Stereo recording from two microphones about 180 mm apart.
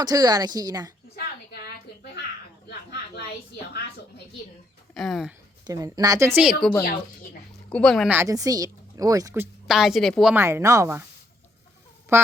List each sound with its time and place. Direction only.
0.0 s a woman's voice: 20° right (ahead or behind)
3.2 s a woman's voice: 65° left (ahead or behind)
4.9 s speech: centre (ahead or behind)
5.6 s a woman's voice: 20° right (ahead or behind); by 6.7 s 5° right (ahead or behind)
7.7 s speech: 5° left (ahead or behind)
8.1 s a woman's voice: 15° right (ahead or behind); by 10.3 s centre (ahead or behind)
10.3 s a woman's voice: 15° right (ahead or behind)
12.1 s a woman's voice: 15° right (ahead or behind)